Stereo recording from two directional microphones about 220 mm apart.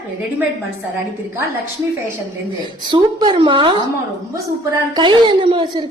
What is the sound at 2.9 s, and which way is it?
A woman's voice, 20° right (ahead or behind).